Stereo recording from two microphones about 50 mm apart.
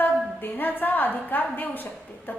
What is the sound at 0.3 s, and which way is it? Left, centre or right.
A woman's voice, left.